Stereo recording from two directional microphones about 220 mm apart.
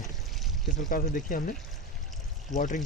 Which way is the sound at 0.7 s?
35° left (ahead or behind).